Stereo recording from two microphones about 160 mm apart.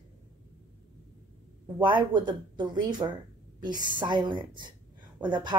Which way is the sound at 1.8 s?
30° right (ahead or behind).